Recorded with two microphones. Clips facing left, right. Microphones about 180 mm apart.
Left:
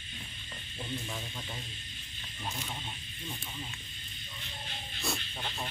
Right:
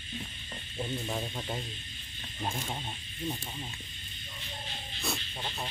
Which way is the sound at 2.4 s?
45° right (ahead or behind).